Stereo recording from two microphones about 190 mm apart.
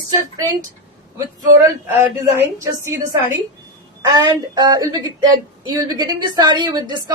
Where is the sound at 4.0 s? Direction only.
20° right (ahead or behind).